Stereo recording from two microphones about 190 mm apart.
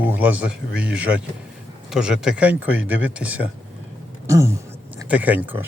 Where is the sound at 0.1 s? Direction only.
10° right (ahead or behind).